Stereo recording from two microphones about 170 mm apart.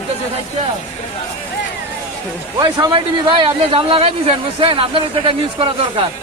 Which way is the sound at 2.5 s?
25° right (ahead or behind).